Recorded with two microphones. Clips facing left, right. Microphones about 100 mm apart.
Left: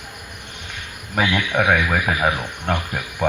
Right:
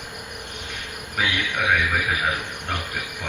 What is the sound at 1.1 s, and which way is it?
Speech, 60° left (ahead or behind).